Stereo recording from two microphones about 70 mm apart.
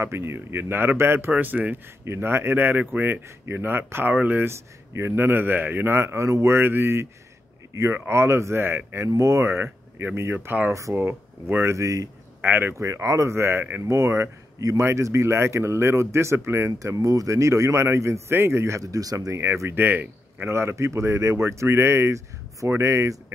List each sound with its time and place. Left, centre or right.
0.0 s speech: right
1.3 s speech: right
4.5 s speech: right
10.7 s speech: right
11.0 s speech: right
12.4 s speech: right
12.7 s speech: right
16.7 s speech: right
19.7 s speech: right
20.4 s speech: right